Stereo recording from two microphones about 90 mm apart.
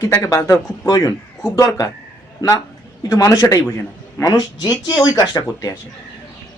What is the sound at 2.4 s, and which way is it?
Speech, 45° left (ahead or behind).